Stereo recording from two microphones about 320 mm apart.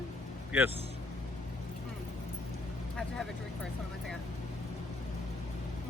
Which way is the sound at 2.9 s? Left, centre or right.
Centre.